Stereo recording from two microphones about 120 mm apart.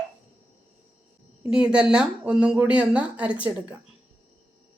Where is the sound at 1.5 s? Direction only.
10° right (ahead or behind).